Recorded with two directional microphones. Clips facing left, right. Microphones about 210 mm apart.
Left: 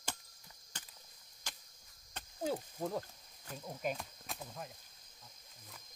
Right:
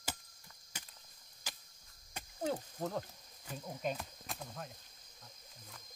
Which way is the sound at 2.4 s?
5° left (ahead or behind).